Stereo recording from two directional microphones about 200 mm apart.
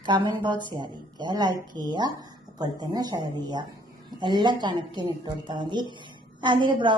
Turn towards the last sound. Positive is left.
turn(degrees=-25)  # may be behind; listen again after turning